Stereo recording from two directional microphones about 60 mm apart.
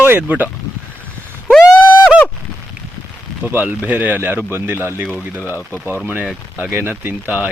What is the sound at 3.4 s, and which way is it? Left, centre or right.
Speech, right.